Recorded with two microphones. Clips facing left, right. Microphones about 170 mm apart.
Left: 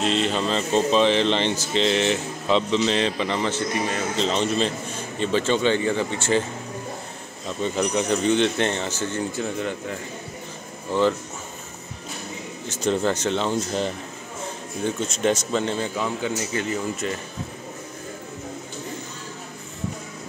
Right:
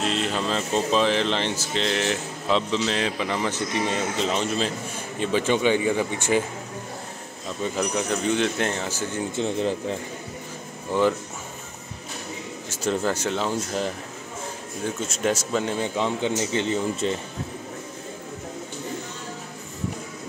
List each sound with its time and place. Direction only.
0.0 s speech: 5° right (ahead or behind)
4.2 s speech: 5° right (ahead or behind)
7.6 s speech: 5° right (ahead or behind)
9.3 s speech: 30° right (ahead or behind)
10.9 s speech: 10° right (ahead or behind)
12.6 s speech: 5° right (ahead or behind)
16.0 s speech: 25° right (ahead or behind)